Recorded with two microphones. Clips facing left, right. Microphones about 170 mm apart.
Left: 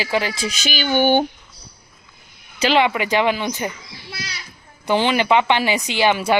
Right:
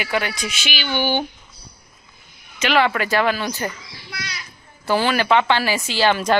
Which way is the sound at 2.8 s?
15° left (ahead or behind).